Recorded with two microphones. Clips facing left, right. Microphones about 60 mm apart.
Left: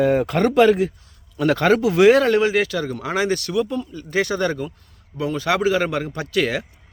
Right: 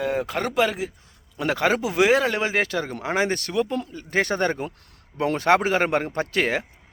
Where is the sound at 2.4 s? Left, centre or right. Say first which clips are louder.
Left 4 dB; right.